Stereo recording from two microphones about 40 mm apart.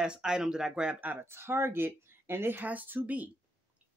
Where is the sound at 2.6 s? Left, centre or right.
Right.